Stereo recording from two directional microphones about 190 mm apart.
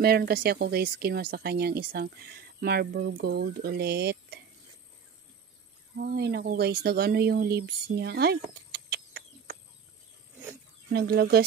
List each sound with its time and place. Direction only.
0.0 s speech: 55° right (ahead or behind)
5.9 s speech: 55° right (ahead or behind)
10.9 s speech: 55° right (ahead or behind)